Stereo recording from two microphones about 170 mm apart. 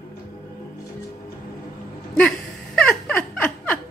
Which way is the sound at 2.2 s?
5° left (ahead or behind).